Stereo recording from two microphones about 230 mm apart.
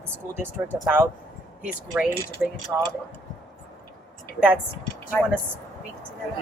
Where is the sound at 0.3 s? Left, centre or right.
Centre.